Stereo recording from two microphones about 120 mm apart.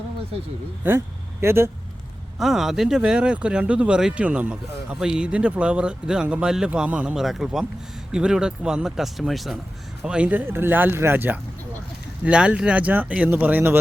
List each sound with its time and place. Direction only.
0.9 s speech: 20° right (ahead or behind)
2.4 s speech: 5° right (ahead or behind)
10.0 s speech: 10° right (ahead or behind)